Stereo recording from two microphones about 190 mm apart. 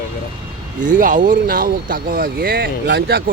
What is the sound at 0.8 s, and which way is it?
Speech, 45° right (ahead or behind).